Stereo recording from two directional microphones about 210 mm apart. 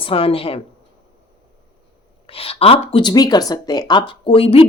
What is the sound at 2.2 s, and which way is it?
Speech, 25° left (ahead or behind).